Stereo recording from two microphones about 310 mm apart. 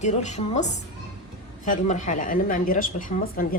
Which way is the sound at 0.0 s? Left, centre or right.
Left.